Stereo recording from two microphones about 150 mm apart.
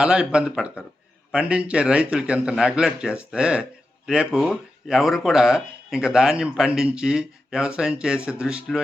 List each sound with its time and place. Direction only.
0.0 s a man's voice: 5° right (ahead or behind)